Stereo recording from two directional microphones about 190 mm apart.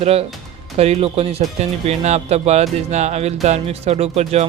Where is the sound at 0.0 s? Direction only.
30° right (ahead or behind).